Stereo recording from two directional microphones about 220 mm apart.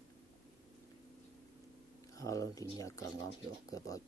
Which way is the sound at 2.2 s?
15° left (ahead or behind).